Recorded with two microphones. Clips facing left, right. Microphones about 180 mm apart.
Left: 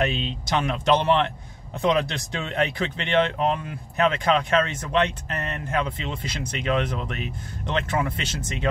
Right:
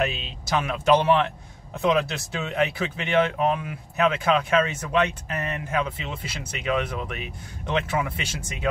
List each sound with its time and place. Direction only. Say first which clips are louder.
0.0 s speech: left 2 dB; 5° right (ahead or behind)